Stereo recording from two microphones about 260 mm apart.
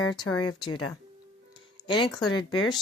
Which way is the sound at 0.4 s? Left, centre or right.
Centre.